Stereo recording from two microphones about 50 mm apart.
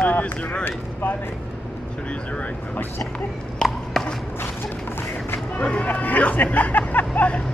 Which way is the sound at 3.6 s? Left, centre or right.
Centre.